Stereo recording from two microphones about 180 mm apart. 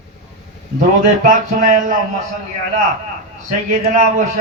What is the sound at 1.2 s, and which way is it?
Speech, 45° right (ahead or behind).